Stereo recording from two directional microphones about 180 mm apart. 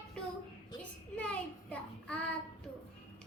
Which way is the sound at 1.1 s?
5° left (ahead or behind).